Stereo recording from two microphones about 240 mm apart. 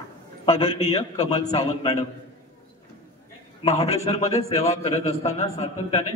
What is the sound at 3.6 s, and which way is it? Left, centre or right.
A man's voice, left.